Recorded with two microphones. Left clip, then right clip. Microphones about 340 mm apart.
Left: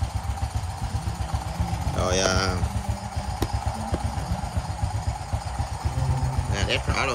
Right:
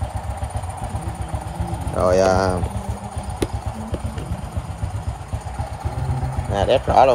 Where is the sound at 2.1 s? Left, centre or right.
Right.